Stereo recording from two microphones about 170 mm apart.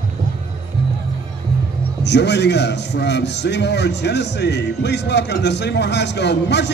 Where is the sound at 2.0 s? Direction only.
90° left.